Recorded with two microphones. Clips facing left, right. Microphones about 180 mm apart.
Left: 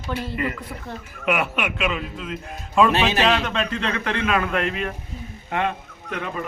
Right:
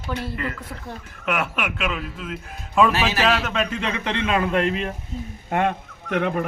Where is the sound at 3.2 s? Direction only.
5° right (ahead or behind); by 4.9 s 30° right (ahead or behind).